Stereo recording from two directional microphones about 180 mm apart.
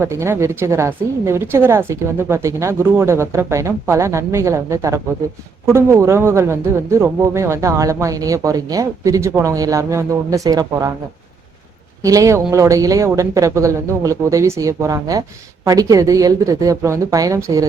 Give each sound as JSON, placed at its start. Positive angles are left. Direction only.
{"t": 0.0, "sound": "speech", "side_deg": -15}
{"t": 12.0, "sound": "a woman's voice", "side_deg": -15}